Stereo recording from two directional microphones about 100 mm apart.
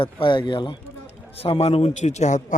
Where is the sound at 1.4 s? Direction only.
75° left (ahead or behind); by 2.2 s 90° left.